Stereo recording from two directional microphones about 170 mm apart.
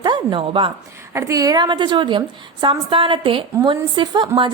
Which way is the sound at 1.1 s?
20° right (ahead or behind).